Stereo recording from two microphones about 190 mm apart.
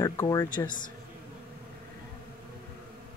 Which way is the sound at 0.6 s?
45° left (ahead or behind).